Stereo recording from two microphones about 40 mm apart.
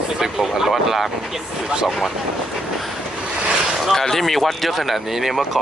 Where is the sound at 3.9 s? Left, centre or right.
Centre.